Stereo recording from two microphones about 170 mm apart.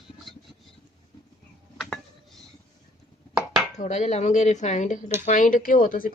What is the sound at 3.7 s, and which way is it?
Speech, 45° left (ahead or behind).